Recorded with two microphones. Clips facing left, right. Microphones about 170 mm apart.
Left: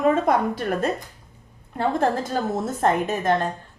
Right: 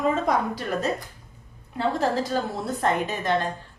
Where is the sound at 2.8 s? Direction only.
45° left (ahead or behind).